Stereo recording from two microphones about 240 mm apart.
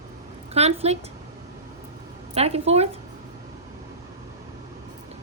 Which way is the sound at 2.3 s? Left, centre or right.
Right.